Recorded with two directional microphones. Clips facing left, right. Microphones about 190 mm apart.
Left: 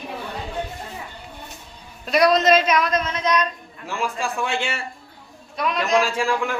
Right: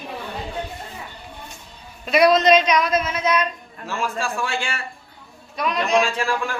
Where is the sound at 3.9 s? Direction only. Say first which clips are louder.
Even; 15° left (ahead or behind).